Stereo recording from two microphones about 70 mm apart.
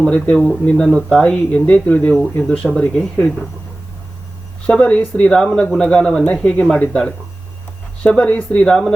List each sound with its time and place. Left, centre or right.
0.0 s speech: centre
4.6 s speech: centre
8.0 s speech: centre
8.6 s speech: centre